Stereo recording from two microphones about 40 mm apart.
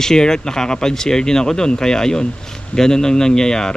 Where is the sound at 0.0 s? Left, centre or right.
Centre.